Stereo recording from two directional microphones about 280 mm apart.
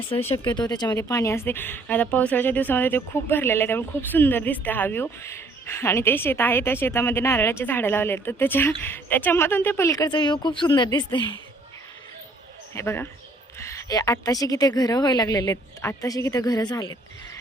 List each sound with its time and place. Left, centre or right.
0.1 s speech: left
12.7 s speech: centre